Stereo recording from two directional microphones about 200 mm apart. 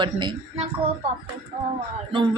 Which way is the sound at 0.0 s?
25° right (ahead or behind).